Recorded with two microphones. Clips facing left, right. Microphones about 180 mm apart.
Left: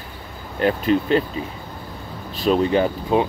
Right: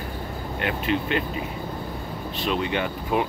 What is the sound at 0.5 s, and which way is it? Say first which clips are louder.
Speech: left 7 dB; 40° left (ahead or behind).